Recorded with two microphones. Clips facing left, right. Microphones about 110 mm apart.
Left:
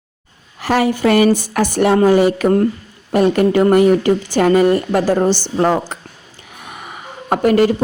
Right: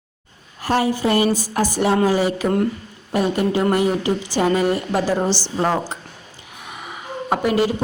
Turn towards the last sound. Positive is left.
turn(degrees=55)  # may be behind; listen again after turning